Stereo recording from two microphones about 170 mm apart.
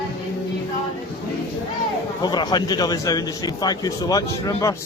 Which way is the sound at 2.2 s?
25° left (ahead or behind).